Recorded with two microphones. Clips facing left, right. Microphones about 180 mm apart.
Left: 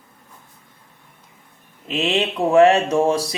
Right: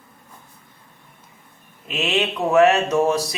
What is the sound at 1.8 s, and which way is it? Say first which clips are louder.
A man's voice: left 2 dB; 30° left (ahead or behind).